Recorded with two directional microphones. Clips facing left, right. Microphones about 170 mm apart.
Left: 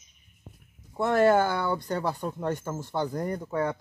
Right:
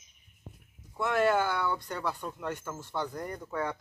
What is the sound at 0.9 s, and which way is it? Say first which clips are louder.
Speech: left 5 dB; 40° left (ahead or behind).